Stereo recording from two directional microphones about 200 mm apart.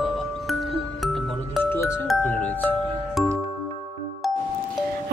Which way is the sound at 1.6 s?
10° left (ahead or behind).